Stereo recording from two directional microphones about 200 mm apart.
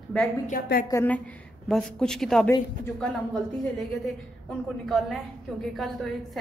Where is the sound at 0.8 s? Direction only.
10° left (ahead or behind).